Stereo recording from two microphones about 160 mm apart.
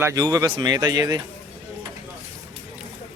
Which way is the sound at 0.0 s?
20° right (ahead or behind).